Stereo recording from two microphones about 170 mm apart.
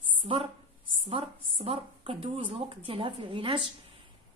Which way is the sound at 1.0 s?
35° right (ahead or behind).